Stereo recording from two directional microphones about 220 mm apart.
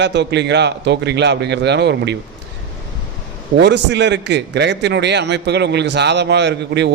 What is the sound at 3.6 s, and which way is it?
A man's voice, 50° right (ahead or behind).